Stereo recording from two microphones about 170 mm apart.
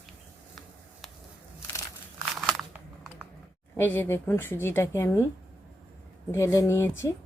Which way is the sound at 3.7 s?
10° left (ahead or behind).